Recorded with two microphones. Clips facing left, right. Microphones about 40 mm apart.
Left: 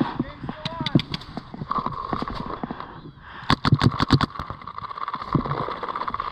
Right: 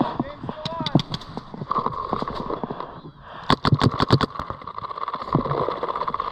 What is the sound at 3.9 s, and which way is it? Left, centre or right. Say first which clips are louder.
Engine: right 1 dB; centre.